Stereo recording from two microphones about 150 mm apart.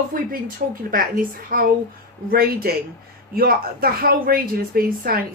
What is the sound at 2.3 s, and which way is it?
Speech, 90° right.